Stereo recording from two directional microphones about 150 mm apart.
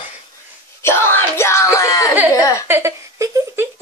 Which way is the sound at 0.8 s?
15° left (ahead or behind).